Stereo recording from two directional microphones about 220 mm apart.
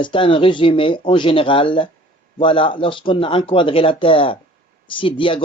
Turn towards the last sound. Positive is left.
turn(degrees=25)  # may be behind; listen again after turning